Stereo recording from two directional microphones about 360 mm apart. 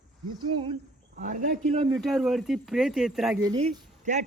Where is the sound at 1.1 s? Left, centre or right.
Right.